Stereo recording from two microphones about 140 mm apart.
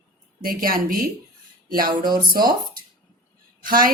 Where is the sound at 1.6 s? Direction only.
90° right.